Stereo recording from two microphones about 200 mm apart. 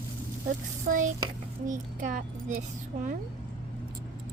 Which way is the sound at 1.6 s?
40° right (ahead or behind).